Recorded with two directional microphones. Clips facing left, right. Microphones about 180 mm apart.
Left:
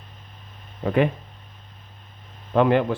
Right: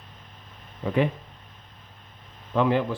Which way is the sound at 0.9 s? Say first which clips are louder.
Left 3 dB; 60° left (ahead or behind).